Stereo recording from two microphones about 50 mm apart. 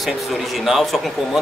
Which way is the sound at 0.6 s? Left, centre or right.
Centre.